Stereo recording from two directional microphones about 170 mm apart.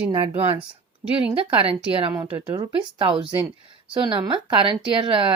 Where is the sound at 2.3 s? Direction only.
25° right (ahead or behind).